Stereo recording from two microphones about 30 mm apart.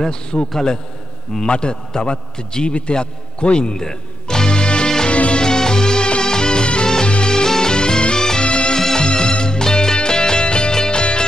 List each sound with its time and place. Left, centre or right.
0.3 s a man's voice: left
1.4 s a man's voice: left
3.7 s music: left
5.1 s music: left
5.4 s music: left
8.5 s music: left
8.7 s music: left